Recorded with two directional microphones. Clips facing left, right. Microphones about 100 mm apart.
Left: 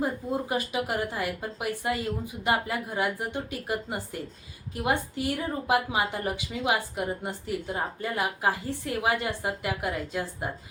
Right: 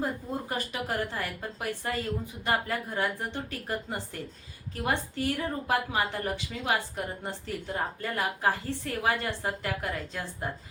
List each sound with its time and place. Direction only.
0.0 s a woman's voice: 10° left (ahead or behind)